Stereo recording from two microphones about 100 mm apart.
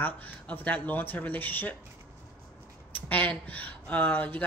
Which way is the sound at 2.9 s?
15° left (ahead or behind).